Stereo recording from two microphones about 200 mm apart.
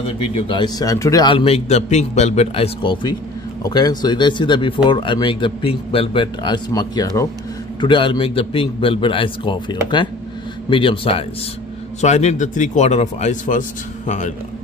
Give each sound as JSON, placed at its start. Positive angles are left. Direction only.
{"t": 0.2, "sound": "a man's voice", "side_deg": 25}